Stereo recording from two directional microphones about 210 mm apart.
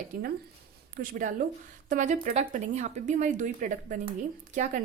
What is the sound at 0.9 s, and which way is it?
A woman's voice, 40° right (ahead or behind).